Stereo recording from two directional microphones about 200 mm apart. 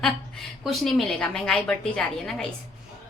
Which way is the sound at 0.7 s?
Centre (ahead or behind).